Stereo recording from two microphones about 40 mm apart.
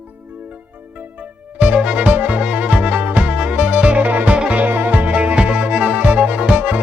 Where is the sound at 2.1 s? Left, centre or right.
Right.